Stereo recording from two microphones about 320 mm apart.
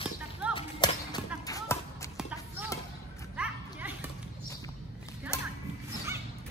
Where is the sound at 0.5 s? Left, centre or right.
Centre.